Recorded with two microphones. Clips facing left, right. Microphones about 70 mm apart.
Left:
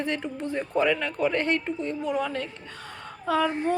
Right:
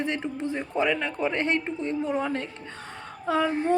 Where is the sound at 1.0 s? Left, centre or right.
Right.